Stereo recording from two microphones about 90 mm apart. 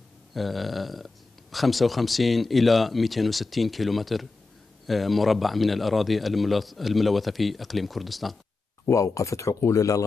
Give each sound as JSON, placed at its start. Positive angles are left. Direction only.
{"t": 0.3, "sound": "speech", "side_deg": 0}
{"t": 8.8, "sound": "speech", "side_deg": 35}